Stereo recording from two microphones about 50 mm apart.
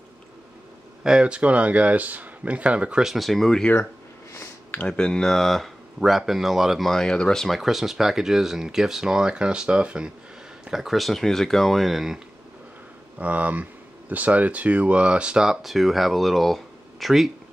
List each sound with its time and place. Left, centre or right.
1.0 s speech: centre
3.0 s speech: centre
3.3 s speech: centre
4.7 s speech: left
5.9 s speech: centre
6.9 s speech: centre
7.4 s speech: centre; by 10.1 s right
10.6 s speech: centre
13.2 s speech: right
15.4 s speech: centre